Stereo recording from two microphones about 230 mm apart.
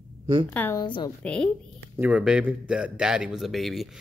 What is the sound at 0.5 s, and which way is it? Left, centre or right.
Speech, centre.